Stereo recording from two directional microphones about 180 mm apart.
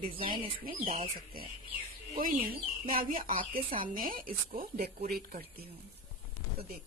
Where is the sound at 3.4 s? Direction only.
30° right (ahead or behind).